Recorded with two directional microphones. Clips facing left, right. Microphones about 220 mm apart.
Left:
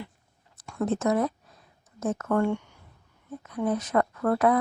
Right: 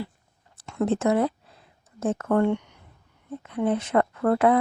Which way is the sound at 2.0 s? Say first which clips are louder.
Right 3 dB; 30° right (ahead or behind).